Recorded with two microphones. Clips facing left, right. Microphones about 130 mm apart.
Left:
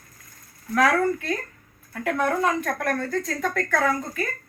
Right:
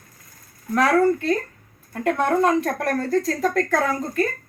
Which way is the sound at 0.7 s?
30° right (ahead or behind).